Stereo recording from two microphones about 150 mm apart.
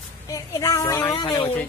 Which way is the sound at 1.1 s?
30° left (ahead or behind).